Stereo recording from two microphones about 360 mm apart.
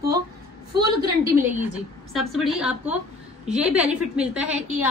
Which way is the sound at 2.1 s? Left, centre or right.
Centre.